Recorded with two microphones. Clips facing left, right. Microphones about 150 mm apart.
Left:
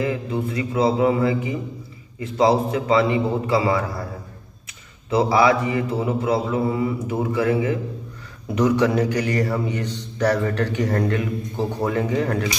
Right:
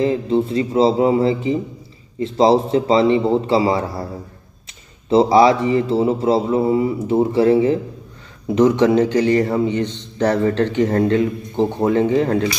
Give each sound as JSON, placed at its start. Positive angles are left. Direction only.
{"t": 0.0, "sound": "a man's voice", "side_deg": -30}
{"t": 5.1, "sound": "a man's voice", "side_deg": -30}